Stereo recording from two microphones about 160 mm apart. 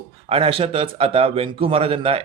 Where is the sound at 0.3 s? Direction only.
35° right (ahead or behind).